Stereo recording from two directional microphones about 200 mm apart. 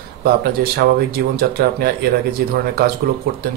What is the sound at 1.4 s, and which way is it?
Speech, 50° right (ahead or behind).